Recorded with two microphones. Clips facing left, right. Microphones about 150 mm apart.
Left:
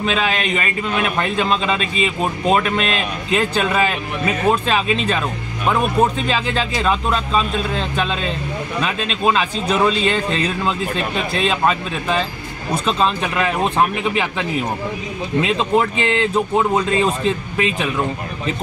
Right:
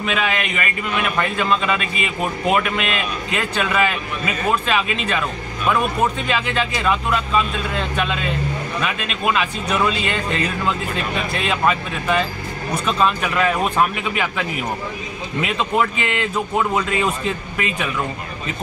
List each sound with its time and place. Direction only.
0.0 s a man's voice: 30° left (ahead or behind)
15.4 s a man's voice: 30° left (ahead or behind)